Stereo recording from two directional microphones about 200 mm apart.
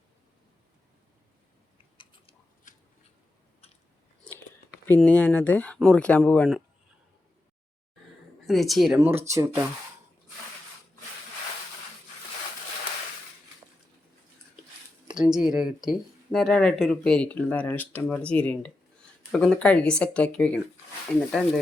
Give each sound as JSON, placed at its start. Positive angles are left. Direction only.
{"t": 2.7, "sound": "scissors", "side_deg": 40}
{"t": 4.9, "sound": "speech", "side_deg": 5}
{"t": 8.4, "sound": "speech", "side_deg": 0}
{"t": 9.0, "sound": "speech", "side_deg": -10}
{"t": 15.1, "sound": "speech", "side_deg": -5}